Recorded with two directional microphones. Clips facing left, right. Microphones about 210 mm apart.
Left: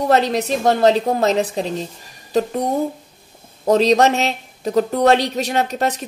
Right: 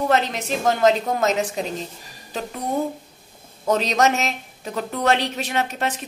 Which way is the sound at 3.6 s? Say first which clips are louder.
Left 6 dB; 35° left (ahead or behind).